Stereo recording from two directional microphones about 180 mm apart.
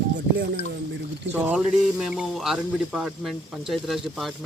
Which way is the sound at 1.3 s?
10° right (ahead or behind).